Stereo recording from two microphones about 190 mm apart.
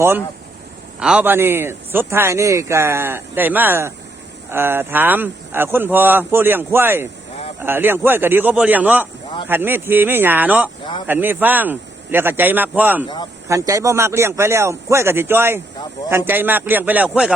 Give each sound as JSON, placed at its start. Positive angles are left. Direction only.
{"t": 0.9, "sound": "a man's voice", "side_deg": -5}